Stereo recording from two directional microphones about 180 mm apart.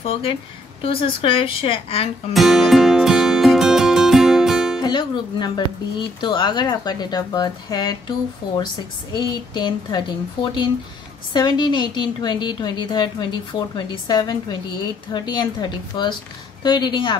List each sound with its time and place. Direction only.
0.0 s a woman's voice: 30° left (ahead or behind)
2.3 s music: centre (ahead or behind)
4.8 s a woman's voice: 25° left (ahead or behind)
9.1 s a woman's voice: 25° left (ahead or behind)